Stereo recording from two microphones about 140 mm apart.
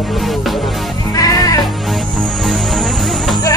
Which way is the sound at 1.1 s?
25° left (ahead or behind).